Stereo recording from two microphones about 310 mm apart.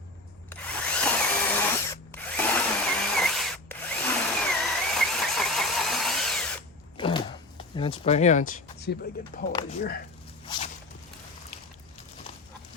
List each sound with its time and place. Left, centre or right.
0.5 s drill: centre
6.9 s a sound: centre
7.8 s speech: centre
9.5 s speech: centre